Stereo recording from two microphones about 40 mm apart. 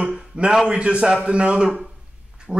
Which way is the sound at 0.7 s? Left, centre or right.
Right.